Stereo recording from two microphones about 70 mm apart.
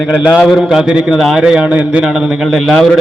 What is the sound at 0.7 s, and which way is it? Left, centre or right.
A man's voice, centre.